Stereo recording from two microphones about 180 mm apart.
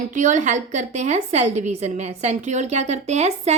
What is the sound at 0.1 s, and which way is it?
A woman's voice, 45° right (ahead or behind).